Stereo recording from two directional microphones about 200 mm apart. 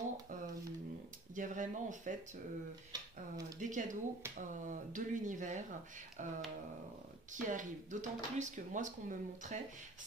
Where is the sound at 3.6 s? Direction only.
40° right (ahead or behind).